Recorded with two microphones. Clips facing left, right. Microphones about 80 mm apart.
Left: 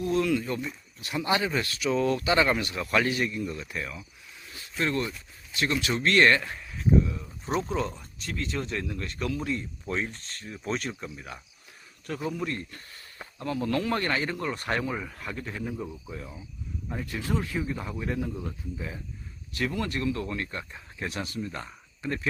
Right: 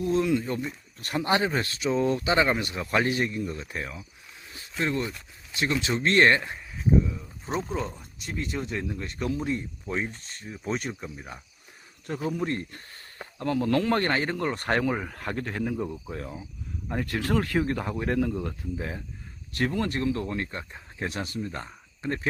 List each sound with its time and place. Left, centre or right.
0.0 s speech: right
0.9 s speech: right
4.8 s speech: centre
9.8 s speech: centre
12.4 s speech: right
16.9 s speech: right
19.5 s speech: right